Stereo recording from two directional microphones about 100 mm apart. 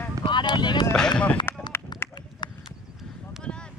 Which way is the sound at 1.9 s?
45° left (ahead or behind).